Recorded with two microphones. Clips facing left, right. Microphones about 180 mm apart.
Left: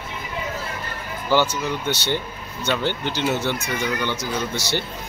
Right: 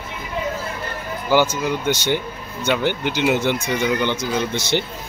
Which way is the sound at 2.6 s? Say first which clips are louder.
Right 3 dB; 15° right (ahead or behind).